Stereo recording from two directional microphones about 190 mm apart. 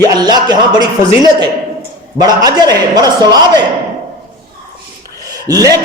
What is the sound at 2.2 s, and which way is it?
Speech, 20° right (ahead or behind).